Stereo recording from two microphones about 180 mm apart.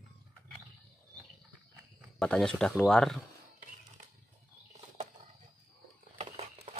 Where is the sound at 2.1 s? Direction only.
5° left (ahead or behind).